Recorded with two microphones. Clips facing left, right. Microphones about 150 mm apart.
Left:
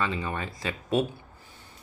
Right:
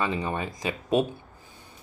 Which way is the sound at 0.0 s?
20° right (ahead or behind).